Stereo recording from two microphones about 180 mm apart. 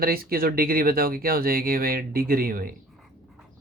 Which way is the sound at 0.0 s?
55° right (ahead or behind).